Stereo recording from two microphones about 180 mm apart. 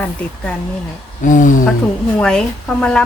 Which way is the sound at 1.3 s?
45° left (ahead or behind).